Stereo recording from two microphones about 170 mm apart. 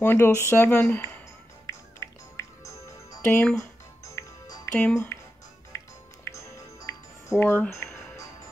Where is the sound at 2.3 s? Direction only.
20° left (ahead or behind).